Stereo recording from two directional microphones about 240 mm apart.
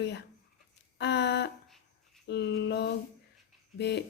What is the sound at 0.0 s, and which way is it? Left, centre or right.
Speech, left.